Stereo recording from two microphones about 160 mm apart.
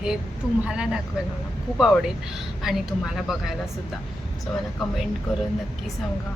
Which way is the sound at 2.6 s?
Centre (ahead or behind).